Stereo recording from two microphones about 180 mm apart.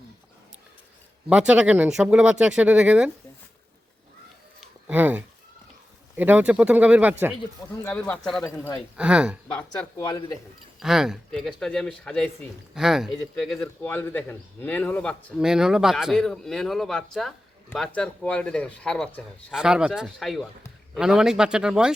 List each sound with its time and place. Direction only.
1.3 s speech: 5° right (ahead or behind)
4.6 s a sound: 10° right (ahead or behind)
6.1 s speech: 10° right (ahead or behind)
7.9 s speech: 10° left (ahead or behind)
8.5 s speech: 15° left (ahead or behind)
9.0 s speech: 5° right (ahead or behind)
10.0 s speech: 20° left (ahead or behind)
10.8 s speech: 5° right (ahead or behind)
15.4 s speech: 5° right (ahead or behind)
19.5 s speech: 5° right (ahead or behind)